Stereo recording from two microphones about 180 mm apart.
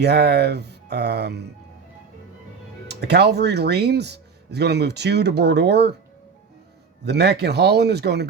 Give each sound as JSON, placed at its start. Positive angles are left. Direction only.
{"t": 0.0, "sound": "speech", "side_deg": -65}
{"t": 2.8, "sound": "speech", "side_deg": -65}
{"t": 7.0, "sound": "speech", "side_deg": -65}